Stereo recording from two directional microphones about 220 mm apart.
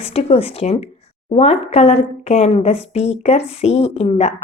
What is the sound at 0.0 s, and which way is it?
A woman's voice, 25° left (ahead or behind).